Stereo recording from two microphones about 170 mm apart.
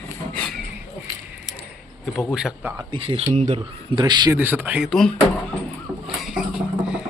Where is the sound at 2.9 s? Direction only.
30° right (ahead or behind).